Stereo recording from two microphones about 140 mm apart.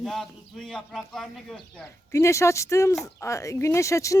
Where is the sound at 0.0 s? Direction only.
Centre (ahead or behind).